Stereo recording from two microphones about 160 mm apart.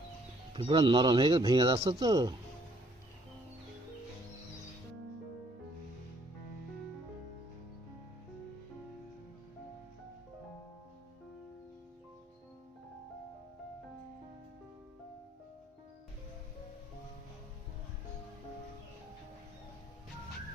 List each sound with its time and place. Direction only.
0.5 s speech: 30° right (ahead or behind)